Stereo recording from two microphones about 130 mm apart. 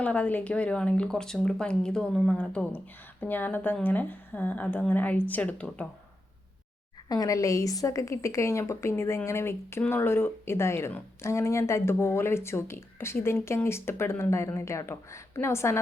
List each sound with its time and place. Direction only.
0.0 s speech: 10° left (ahead or behind)
7.1 s a woman's voice: 25° left (ahead or behind)